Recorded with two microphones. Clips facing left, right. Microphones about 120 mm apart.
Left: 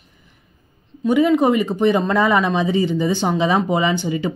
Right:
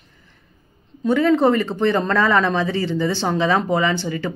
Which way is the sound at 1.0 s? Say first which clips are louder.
Left 1 dB; 10° left (ahead or behind).